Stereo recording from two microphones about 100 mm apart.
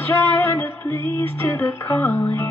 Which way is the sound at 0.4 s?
25° left (ahead or behind).